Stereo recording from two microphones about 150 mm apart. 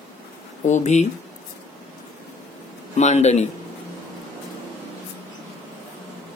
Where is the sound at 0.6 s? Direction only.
55° left (ahead or behind).